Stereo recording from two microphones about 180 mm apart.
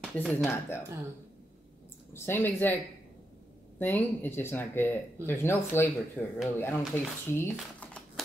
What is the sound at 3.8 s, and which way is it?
Speech, 10° left (ahead or behind).